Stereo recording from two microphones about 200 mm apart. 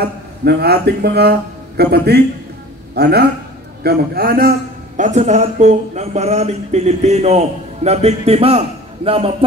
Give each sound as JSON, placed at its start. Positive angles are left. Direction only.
{"t": 0.0, "sound": "a man's voice", "side_deg": -55}